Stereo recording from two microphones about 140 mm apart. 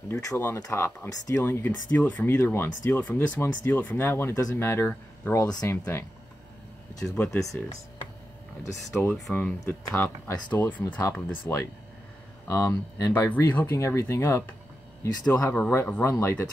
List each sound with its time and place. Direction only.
0.1 s speech: 20° left (ahead or behind)
5.4 s speech: 25° left (ahead or behind)
7.2 s speech: 5° left (ahead or behind)
9.1 s speech: 5° left (ahead or behind); by 13.3 s 25° left (ahead or behind)
13.3 s speech: 10° left (ahead or behind)